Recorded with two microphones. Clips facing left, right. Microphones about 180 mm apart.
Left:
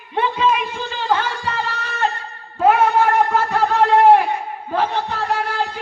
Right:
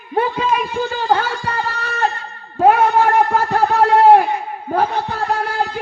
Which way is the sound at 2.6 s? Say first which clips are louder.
Right 2 dB; 45° right (ahead or behind).